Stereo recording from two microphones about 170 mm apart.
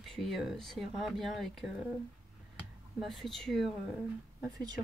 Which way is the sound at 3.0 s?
Centre (ahead or behind).